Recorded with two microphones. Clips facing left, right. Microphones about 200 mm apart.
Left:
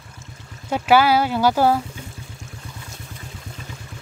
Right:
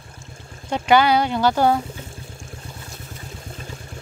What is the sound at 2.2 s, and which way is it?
Vehicle, 30° right (ahead or behind).